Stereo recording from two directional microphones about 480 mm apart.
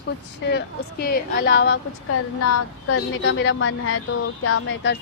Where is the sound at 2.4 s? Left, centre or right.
Left.